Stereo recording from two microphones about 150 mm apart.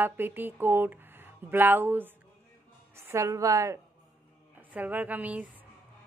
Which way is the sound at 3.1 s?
20° right (ahead or behind).